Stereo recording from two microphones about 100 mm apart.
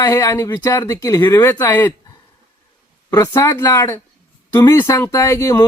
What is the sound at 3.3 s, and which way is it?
Speech, 25° left (ahead or behind).